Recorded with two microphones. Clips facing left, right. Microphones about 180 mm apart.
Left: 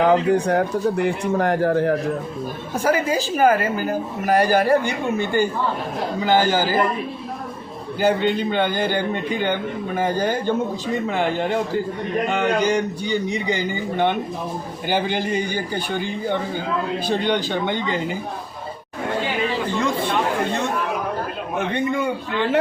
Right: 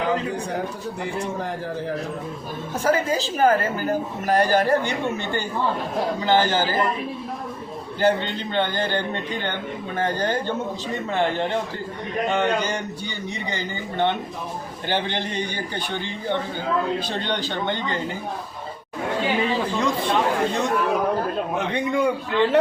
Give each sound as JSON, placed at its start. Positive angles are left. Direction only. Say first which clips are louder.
{"t": 0.1, "sound": "speech", "louder": "left 8 dB", "side_deg": 70}
{"t": 2.8, "sound": "a man's voice", "louder": "left 1 dB", "side_deg": 10}
{"t": 8.0, "sound": "a man's voice", "louder": "left 3 dB", "side_deg": 10}
{"t": 21.9, "sound": "a man's voice", "louder": "right 2 dB", "side_deg": 0}